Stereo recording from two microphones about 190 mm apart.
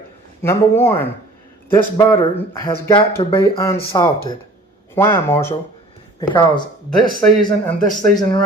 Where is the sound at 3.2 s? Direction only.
25° left (ahead or behind).